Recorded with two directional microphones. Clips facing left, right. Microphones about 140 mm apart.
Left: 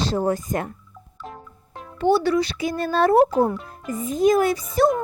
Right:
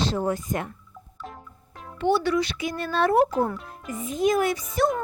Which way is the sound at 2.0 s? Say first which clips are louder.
Left 4 dB; 35° left (ahead or behind).